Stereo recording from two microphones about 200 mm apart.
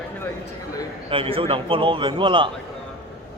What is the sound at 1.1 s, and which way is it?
A man's voice, 25° right (ahead or behind).